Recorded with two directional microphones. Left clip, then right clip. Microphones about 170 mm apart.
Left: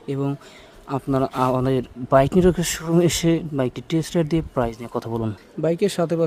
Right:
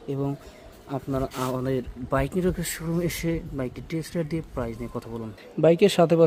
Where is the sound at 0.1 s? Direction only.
40° left (ahead or behind).